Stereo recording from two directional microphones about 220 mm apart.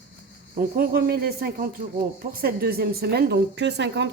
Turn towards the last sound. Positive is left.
turn(degrees=-50)  # may be behind; listen again after turning